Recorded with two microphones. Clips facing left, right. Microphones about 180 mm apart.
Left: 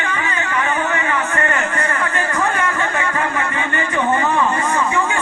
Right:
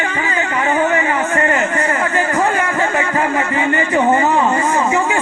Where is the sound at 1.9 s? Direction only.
35° right (ahead or behind).